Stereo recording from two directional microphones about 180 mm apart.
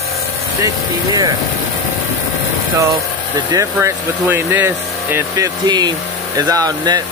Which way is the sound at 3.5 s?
15° right (ahead or behind).